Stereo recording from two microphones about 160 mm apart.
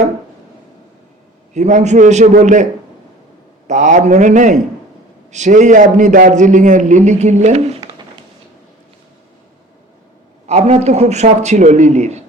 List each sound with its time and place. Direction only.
1.5 s a man's voice: 45° right (ahead or behind)
3.7 s a man's voice: 50° right (ahead or behind)
10.4 s a man's voice: 40° right (ahead or behind)